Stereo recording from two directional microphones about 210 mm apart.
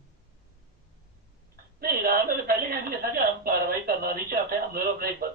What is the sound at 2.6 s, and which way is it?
Speech, 45° right (ahead or behind).